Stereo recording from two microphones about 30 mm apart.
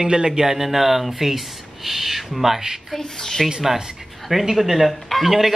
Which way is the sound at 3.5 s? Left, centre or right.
Centre.